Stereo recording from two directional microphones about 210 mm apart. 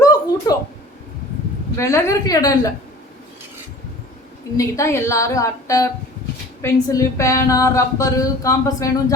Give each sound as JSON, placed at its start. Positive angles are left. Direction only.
{"t": 0.0, "sound": "a sound", "side_deg": 15}
{"t": 1.7, "sound": "speech", "side_deg": 15}
{"t": 4.5, "sound": "speech", "side_deg": 15}